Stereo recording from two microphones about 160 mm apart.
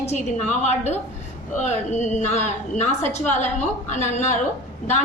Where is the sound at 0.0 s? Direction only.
45° left (ahead or behind).